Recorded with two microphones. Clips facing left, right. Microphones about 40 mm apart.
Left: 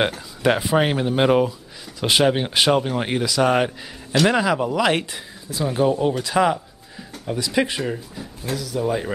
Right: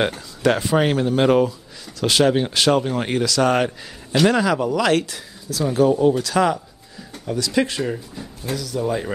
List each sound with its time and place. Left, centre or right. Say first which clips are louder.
0.4 s speech: even; centre
7.8 s speech: right 1 dB; centre